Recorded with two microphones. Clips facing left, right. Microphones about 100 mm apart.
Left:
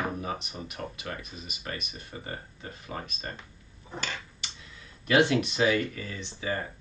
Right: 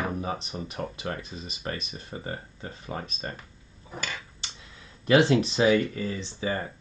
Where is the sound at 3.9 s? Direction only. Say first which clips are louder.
Even; 5° right (ahead or behind).